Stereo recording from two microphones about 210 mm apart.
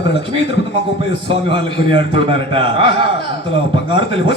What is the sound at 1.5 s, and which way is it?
Speech, 25° right (ahead or behind).